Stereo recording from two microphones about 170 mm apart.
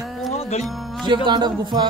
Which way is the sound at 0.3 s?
40° left (ahead or behind).